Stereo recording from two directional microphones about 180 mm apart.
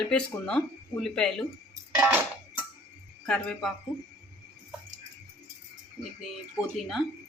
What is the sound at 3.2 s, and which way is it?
Speech, centre (ahead or behind).